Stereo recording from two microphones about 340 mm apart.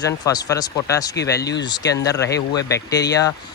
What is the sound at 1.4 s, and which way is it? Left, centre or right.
Speech, left.